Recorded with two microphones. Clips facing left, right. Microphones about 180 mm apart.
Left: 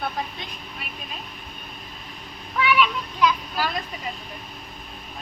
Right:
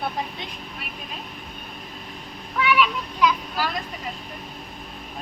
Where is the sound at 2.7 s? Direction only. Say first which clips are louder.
Even; 5° right (ahead or behind).